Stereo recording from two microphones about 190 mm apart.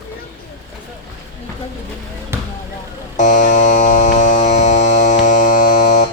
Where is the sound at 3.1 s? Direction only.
40° left (ahead or behind).